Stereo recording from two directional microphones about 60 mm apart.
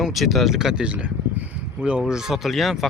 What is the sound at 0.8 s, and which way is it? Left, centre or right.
Speech, right.